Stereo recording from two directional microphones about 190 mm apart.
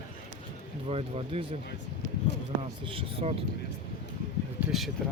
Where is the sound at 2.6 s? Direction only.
30° right (ahead or behind).